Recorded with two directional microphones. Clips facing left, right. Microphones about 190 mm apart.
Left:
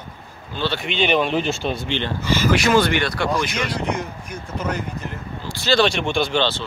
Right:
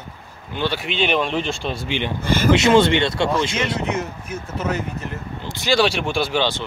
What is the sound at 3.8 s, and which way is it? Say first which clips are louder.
Speech: right 1 dB; 5° right (ahead or behind).